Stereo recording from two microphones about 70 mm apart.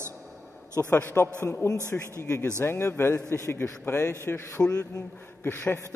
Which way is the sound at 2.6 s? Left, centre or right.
Left.